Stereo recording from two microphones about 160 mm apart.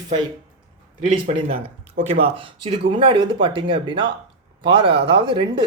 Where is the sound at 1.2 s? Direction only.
40° right (ahead or behind).